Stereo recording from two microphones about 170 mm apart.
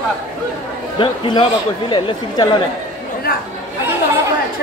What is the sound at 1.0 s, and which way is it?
Speech, 25° left (ahead or behind).